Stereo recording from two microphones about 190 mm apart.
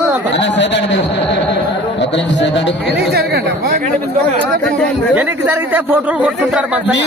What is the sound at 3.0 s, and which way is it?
Speech, 55° right (ahead or behind).